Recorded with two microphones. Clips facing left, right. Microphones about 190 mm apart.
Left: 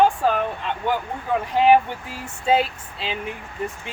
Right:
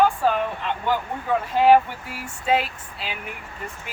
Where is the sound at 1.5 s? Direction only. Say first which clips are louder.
Even; 20° left (ahead or behind).